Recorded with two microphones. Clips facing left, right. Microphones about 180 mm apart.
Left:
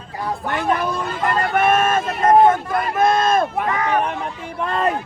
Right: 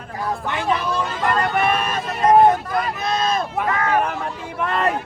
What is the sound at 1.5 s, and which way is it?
Vehicle, 45° left (ahead or behind).